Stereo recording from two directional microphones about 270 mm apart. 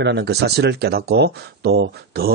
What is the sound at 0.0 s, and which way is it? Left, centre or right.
Speech, right.